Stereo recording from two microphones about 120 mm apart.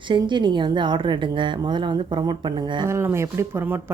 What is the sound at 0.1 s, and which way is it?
A woman's voice, 40° right (ahead or behind).